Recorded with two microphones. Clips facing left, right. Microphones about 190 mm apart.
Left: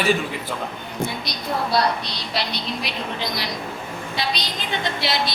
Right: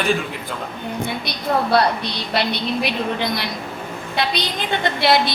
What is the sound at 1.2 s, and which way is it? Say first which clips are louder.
A woman's voice: right 5 dB; 60° right (ahead or behind).